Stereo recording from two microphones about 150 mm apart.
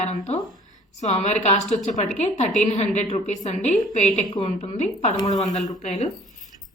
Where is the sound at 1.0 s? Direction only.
50° left (ahead or behind).